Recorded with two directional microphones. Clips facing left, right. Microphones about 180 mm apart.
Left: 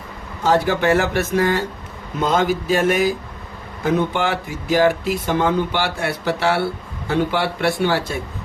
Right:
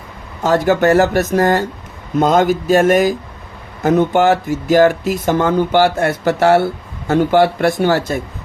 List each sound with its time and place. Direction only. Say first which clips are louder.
0.4 s speech: right 4 dB; 45° right (ahead or behind)